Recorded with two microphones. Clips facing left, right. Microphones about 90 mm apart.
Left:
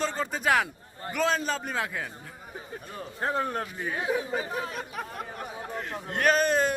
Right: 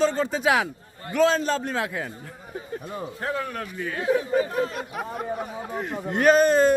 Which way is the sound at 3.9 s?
15° left (ahead or behind).